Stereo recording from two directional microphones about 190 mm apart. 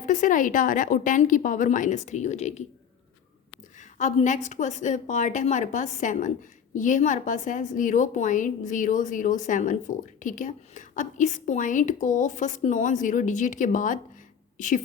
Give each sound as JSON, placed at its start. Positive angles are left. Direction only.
{"t": 0.0, "sound": "a woman's voice", "side_deg": 40}
{"t": 3.8, "sound": "a sound", "side_deg": 40}
{"t": 4.4, "sound": "a woman's voice", "side_deg": 40}